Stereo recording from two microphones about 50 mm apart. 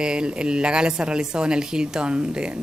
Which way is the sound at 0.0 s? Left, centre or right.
Centre.